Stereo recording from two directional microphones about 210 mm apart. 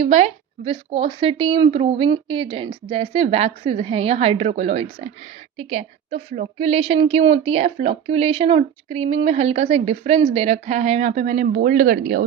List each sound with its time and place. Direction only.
0.0 s a woman's voice: 30° right (ahead or behind)